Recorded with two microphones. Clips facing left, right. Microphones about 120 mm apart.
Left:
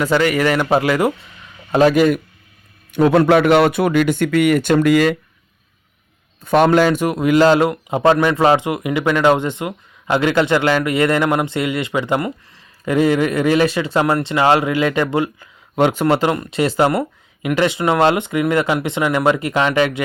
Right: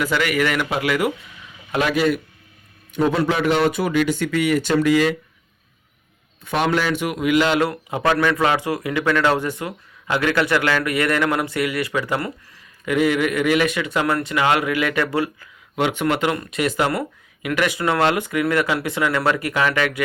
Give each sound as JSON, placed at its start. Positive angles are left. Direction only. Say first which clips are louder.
{"t": 0.0, "sound": "a man's voice", "louder": "left 5 dB", "side_deg": 35}
{"t": 2.9, "sound": "a man's voice", "louder": "left 7 dB", "side_deg": 65}
{"t": 6.4, "sound": "a man's voice", "louder": "left 8 dB", "side_deg": 45}
{"t": 7.6, "sound": "speech", "louder": "left 5 dB", "side_deg": 25}
{"t": 15.7, "sound": "speech", "louder": "left 5 dB", "side_deg": 40}